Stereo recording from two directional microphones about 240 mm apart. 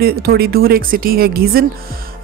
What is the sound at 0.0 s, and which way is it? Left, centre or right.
Speech, right.